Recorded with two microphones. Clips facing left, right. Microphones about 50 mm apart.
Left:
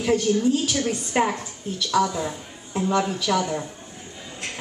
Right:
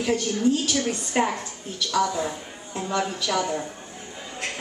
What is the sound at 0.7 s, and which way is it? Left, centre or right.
Speech, centre.